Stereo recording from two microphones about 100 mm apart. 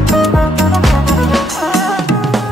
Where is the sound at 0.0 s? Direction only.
Centre (ahead or behind).